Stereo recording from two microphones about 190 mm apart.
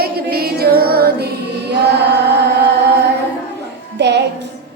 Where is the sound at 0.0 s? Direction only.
55° right (ahead or behind).